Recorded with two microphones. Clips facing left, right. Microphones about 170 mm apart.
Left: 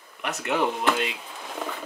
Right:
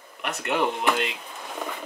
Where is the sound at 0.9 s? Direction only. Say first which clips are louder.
Even; 5° left (ahead or behind).